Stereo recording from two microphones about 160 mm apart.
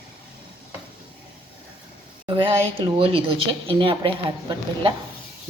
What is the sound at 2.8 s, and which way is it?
A woman's voice, 35° right (ahead or behind).